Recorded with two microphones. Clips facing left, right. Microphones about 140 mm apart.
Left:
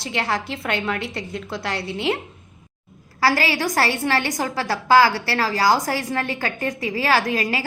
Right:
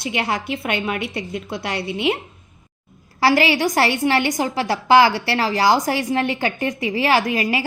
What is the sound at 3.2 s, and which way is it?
A woman's voice, 25° right (ahead or behind).